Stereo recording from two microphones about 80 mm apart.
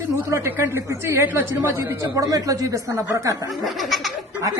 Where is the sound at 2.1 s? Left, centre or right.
Right.